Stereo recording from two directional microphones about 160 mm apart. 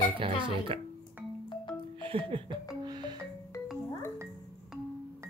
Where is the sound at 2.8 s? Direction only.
25° right (ahead or behind).